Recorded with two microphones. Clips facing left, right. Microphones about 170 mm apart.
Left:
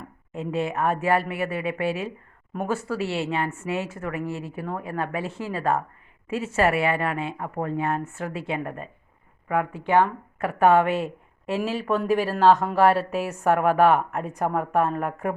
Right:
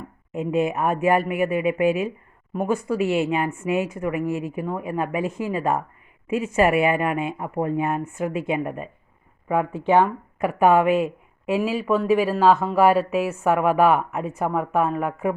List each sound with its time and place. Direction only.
0.3 s a woman's voice: 15° right (ahead or behind)